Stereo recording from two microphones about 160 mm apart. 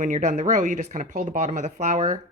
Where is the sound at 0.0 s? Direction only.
50° right (ahead or behind).